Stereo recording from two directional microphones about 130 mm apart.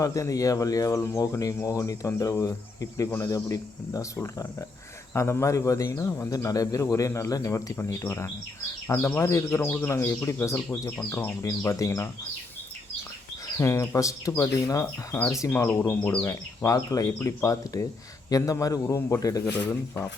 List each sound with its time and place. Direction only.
0.0 s speech: 25° left (ahead or behind)
13.6 s speech: 25° left (ahead or behind)